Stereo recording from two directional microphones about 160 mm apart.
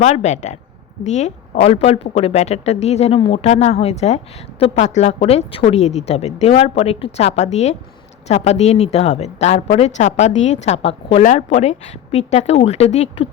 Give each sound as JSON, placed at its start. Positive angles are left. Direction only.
{"t": 0.0, "sound": "a woman's voice", "side_deg": 45}